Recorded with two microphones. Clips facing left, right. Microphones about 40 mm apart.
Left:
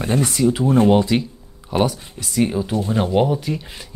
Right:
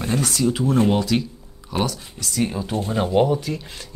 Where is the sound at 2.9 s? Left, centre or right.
Centre.